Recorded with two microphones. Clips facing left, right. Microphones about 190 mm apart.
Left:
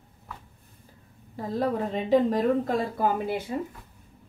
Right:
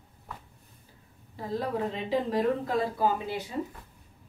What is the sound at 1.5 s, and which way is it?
A woman's voice, 45° left (ahead or behind).